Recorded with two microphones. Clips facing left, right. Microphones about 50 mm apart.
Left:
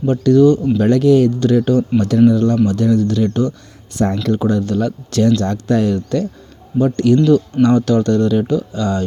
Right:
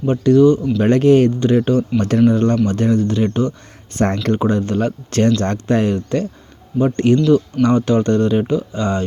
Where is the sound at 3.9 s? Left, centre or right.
Right.